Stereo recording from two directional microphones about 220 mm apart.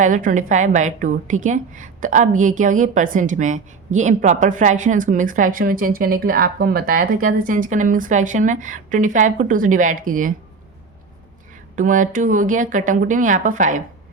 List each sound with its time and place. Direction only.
0.0 s a woman's voice: 35° right (ahead or behind)
11.8 s a woman's voice: 35° right (ahead or behind)